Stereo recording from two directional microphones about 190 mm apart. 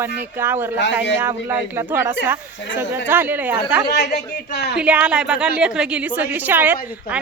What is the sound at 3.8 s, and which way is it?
Speech, 60° left (ahead or behind).